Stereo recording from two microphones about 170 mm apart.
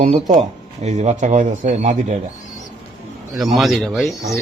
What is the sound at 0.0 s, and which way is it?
Speech, 40° right (ahead or behind).